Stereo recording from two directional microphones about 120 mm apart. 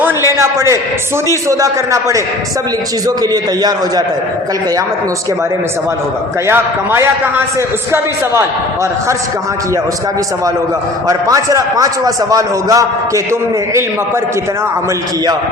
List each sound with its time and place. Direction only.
0.3 s a man's voice: 25° right (ahead or behind)
6.5 s a man's voice: 20° right (ahead or behind)
11.1 s a man's voice: 30° right (ahead or behind)